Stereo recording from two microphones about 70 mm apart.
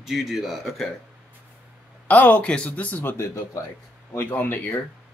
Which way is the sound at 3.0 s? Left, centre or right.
Left.